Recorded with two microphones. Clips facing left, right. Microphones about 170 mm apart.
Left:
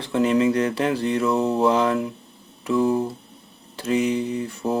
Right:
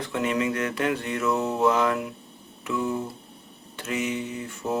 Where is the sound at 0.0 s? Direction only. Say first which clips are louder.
Left 7 dB; 30° left (ahead or behind).